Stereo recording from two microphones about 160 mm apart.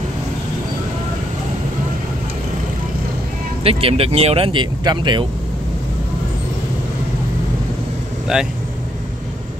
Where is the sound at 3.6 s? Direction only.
40° right (ahead or behind).